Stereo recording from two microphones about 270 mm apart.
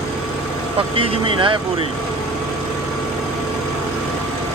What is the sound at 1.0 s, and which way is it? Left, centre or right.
Speech, centre.